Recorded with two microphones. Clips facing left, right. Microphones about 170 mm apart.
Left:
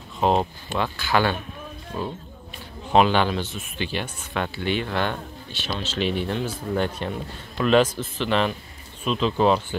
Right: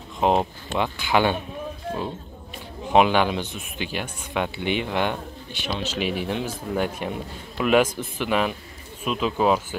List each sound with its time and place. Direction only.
0.2 s speech: 15° right (ahead or behind)
2.9 s speech: 10° right (ahead or behind)